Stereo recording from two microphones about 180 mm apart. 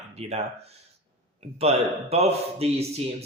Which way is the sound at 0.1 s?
35° right (ahead or behind).